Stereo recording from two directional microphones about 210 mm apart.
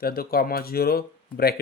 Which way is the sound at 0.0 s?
45° left (ahead or behind).